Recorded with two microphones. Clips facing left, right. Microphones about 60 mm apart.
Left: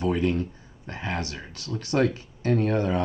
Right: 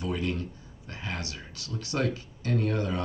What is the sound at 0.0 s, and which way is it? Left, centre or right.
Speech, left.